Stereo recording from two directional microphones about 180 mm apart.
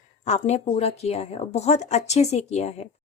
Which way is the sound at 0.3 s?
40° left (ahead or behind).